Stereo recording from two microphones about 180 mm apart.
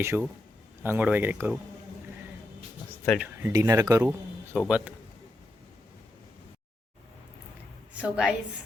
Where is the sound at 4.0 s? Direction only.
10° right (ahead or behind).